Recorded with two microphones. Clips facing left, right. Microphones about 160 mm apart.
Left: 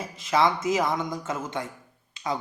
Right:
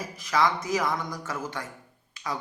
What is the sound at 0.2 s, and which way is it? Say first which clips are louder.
Speech: left 2 dB; 25° left (ahead or behind).